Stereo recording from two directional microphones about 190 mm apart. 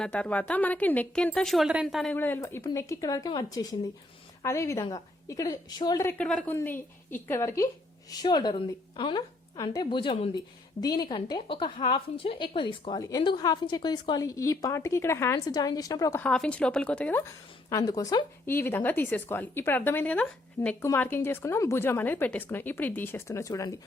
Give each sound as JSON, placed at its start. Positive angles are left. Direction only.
{"t": 0.0, "sound": "a woman's voice", "side_deg": 5}